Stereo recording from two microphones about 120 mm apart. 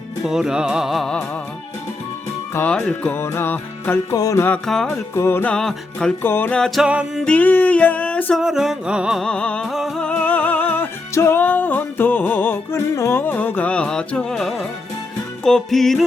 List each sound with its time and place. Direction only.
0.3 s music: 5° right (ahead or behind)
2.6 s music: 10° left (ahead or behind)
3.2 s music: 20° left (ahead or behind)
4.1 s music: 30° left (ahead or behind)
4.4 s music: 5° left (ahead or behind)
5.1 s music: 20° left (ahead or behind)
5.5 s music: 5° left (ahead or behind)
6.2 s music: 15° left (ahead or behind); by 7.3 s 10° right (ahead or behind)
7.3 s music: 15° left (ahead or behind)
8.4 s music: 5° right (ahead or behind)
9.2 s music: 10° left (ahead or behind)
9.6 s music: centre (ahead or behind)
10.0 s music: 10° left (ahead or behind)